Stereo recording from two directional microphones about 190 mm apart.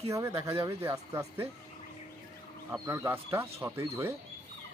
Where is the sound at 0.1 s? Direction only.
15° right (ahead or behind).